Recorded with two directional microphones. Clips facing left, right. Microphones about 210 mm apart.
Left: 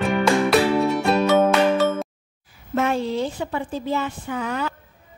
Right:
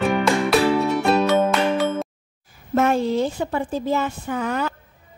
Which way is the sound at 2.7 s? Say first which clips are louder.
Right 3 dB; 45° right (ahead or behind).